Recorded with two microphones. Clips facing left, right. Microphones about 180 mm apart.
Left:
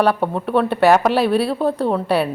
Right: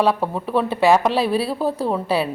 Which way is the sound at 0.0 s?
Centre (ahead or behind).